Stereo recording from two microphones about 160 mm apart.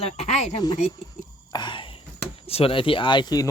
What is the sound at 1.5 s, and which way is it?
Whispering, 30° left (ahead or behind).